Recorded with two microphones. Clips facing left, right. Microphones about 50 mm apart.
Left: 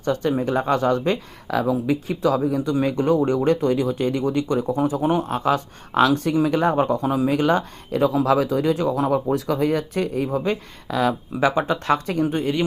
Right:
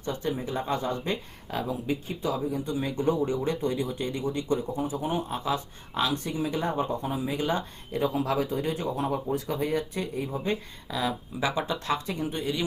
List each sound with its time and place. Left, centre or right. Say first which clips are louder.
0.0 s speech: left 9 dB; left
11.3 s speech: left 9 dB; left
11.7 s speech: left 8 dB; left